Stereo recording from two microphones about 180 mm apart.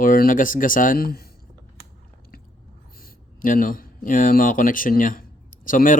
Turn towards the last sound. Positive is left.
turn(degrees=50)  # may be behind; listen again after turning